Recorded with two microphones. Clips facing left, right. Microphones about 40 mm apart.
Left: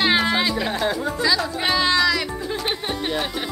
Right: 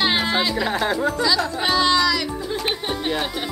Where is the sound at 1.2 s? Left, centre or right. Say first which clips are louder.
Left 4 dB; centre.